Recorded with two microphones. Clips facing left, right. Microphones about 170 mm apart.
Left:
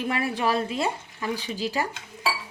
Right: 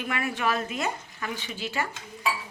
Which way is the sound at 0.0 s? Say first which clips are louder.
Left 3 dB; 35° left (ahead or behind).